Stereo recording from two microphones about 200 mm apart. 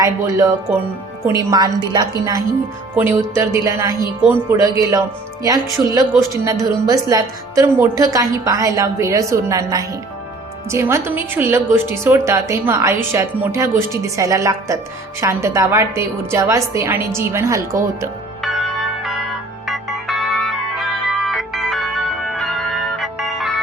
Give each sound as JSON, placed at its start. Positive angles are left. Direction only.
{"t": 0.0, "sound": "a woman's voice", "side_deg": -15}
{"t": 19.6, "sound": "music", "side_deg": 0}